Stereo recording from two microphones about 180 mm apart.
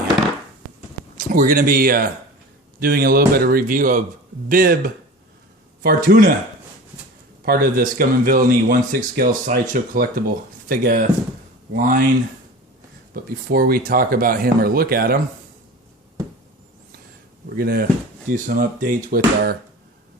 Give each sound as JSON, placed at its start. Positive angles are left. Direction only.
{"t": 1.2, "sound": "speech", "side_deg": -50}
{"t": 7.4, "sound": "speech", "side_deg": -55}
{"t": 13.1, "sound": "speech", "side_deg": -55}
{"t": 17.6, "sound": "speech", "side_deg": -55}